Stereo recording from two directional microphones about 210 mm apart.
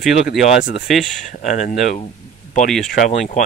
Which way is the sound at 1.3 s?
35° left (ahead or behind).